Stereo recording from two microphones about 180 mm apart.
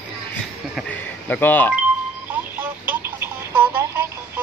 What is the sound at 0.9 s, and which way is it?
Speech, 10° left (ahead or behind).